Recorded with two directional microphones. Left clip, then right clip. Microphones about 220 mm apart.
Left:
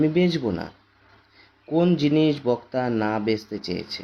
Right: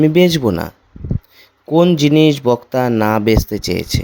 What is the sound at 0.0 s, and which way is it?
Speech, 50° right (ahead or behind).